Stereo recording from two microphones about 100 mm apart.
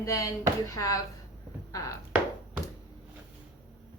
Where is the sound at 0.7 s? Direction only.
35° left (ahead or behind).